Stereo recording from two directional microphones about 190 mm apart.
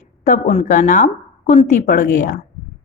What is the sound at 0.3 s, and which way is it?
A woman's voice, 40° left (ahead or behind).